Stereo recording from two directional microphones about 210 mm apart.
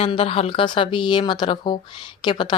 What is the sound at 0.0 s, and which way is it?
A woman's voice, 25° left (ahead or behind).